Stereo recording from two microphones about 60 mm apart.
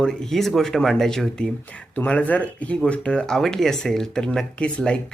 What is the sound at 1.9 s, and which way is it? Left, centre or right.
Speech, left.